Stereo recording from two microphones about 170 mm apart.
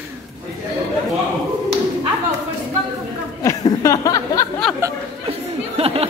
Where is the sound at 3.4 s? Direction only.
20° left (ahead or behind).